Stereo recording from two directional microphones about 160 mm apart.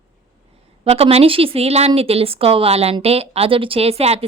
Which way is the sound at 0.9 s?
40° right (ahead or behind).